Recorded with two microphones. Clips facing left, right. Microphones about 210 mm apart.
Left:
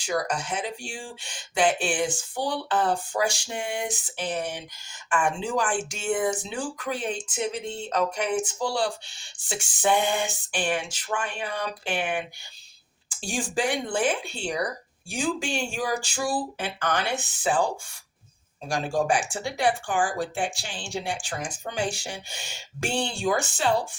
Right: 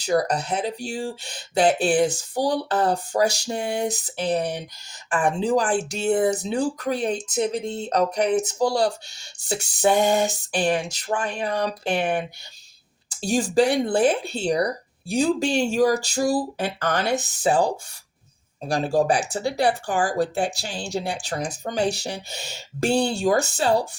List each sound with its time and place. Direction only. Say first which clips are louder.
0.0 s speech: right 6 dB; 35° right (ahead or behind)